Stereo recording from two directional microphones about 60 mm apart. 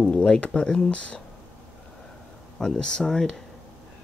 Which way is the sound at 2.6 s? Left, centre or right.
Centre.